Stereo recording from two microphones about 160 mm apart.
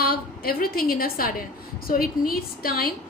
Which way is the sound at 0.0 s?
70° left (ahead or behind).